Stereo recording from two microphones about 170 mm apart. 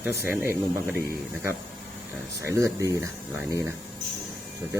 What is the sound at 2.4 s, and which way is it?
Speech, 15° right (ahead or behind).